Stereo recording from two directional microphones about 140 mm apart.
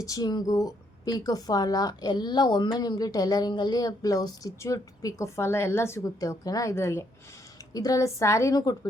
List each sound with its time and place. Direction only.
0.0 s speech: 25° left (ahead or behind)